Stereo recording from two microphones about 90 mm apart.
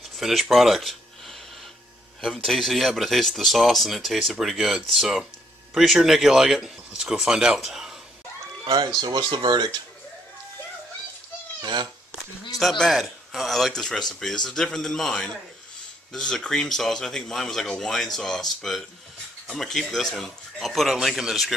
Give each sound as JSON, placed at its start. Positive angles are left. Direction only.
{"t": 0.1, "sound": "speech", "side_deg": 0}
{"t": 2.2, "sound": "speech", "side_deg": 5}
{"t": 8.6, "sound": "speech", "side_deg": -50}
{"t": 11.6, "sound": "speech", "side_deg": -55}
{"t": 12.5, "sound": "speech", "side_deg": 0}